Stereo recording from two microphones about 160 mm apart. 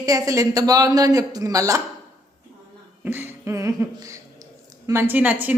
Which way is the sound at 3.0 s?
15° right (ahead or behind).